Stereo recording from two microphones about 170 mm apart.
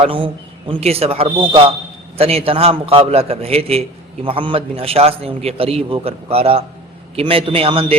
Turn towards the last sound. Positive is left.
turn(degrees=-35)  # may be behind; listen again after turning